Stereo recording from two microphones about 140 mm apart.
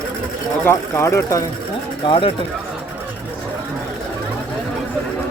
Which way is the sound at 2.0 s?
40° left (ahead or behind).